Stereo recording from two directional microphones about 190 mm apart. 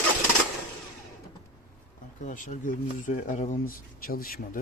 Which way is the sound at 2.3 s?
40° left (ahead or behind).